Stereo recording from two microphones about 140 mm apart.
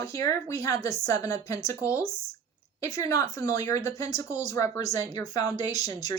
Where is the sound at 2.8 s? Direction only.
20° left (ahead or behind).